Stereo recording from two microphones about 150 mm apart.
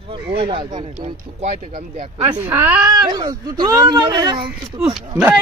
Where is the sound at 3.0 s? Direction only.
25° right (ahead or behind).